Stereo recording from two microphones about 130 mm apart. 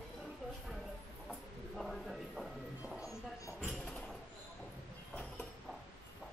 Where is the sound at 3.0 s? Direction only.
25° left (ahead or behind).